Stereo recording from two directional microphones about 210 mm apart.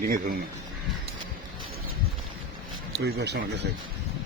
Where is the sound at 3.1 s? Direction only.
50° right (ahead or behind).